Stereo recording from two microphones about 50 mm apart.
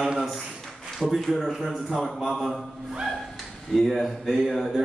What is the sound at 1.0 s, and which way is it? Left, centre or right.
Mantra, centre.